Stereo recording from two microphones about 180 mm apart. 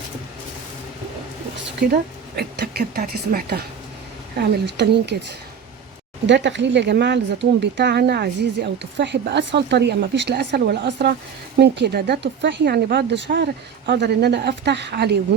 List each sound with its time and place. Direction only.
1.9 s speech: 65° right (ahead or behind)
4.4 s speech: 70° right (ahead or behind)
6.2 s speech: 85° right; by 15.2 s 65° right (ahead or behind)